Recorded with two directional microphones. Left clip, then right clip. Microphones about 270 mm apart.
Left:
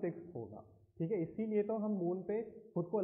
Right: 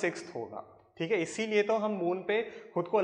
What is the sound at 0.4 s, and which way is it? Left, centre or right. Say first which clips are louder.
Speech: right 9 dB; right.